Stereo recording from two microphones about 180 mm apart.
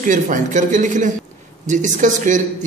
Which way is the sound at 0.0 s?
45° right (ahead or behind).